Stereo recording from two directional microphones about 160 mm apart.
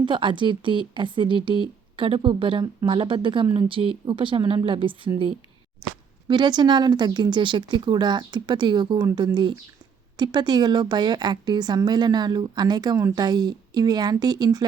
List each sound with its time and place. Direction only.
0.0 s a woman's voice: 30° right (ahead or behind)